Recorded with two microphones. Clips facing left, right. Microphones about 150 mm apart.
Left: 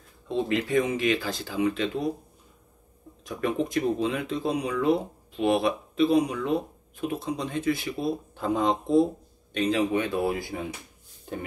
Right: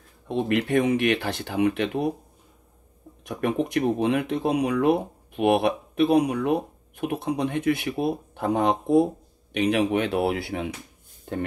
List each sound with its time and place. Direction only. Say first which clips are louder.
0.3 s speech: right 2 dB; 65° right (ahead or behind)
3.3 s speech: right 2 dB; 65° right (ahead or behind)